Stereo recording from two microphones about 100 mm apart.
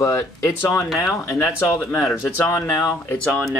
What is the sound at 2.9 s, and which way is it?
Speech, 15° left (ahead or behind).